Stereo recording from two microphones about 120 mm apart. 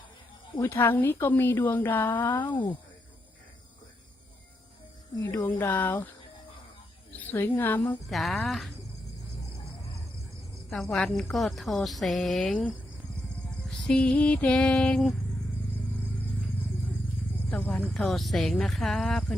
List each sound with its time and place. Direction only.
0.6 s a woman's voice: 20° left (ahead or behind)
2.5 s speech: 40° left (ahead or behind)
5.1 s a woman's voice: 25° left (ahead or behind)
7.1 s a woman's voice: 15° left (ahead or behind)
8.1 s a woman's voice: centre (ahead or behind)
10.7 s a woman's voice: 5° left (ahead or behind)
13.7 s a woman's voice: 10° left (ahead or behind)
17.9 s a woman's voice: centre (ahead or behind)